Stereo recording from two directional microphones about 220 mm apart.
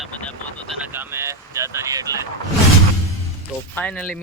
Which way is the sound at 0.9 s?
10° right (ahead or behind).